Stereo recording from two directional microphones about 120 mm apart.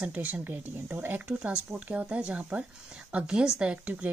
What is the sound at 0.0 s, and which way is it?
Speech, 15° right (ahead or behind).